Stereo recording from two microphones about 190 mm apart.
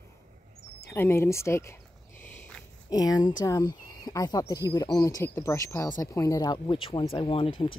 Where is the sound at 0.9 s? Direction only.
10° left (ahead or behind).